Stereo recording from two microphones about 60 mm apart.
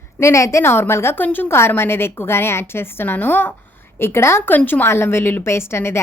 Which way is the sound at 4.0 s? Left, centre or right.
Left.